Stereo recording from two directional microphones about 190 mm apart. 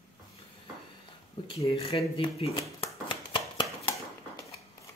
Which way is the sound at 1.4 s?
25° left (ahead or behind).